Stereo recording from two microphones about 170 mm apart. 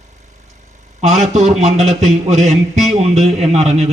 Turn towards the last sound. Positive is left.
turn(degrees=-40)  # may be behind; listen again after turning